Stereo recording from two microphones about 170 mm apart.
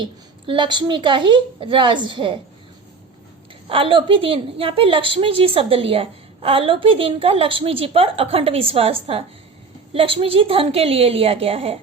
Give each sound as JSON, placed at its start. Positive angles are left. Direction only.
{"t": 0.0, "sound": "a woman's voice", "side_deg": -30}
{"t": 3.7, "sound": "a woman's voice", "side_deg": -30}